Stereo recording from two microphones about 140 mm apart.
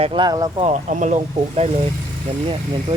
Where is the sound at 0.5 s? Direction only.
55° right (ahead or behind).